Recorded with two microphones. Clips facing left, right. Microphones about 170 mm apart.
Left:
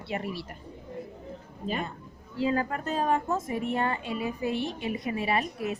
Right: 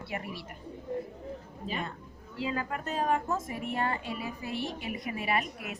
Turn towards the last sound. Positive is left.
turn(degrees=30)  # may be behind; listen again after turning